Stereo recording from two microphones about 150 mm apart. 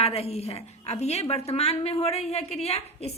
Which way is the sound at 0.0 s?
45° left (ahead or behind).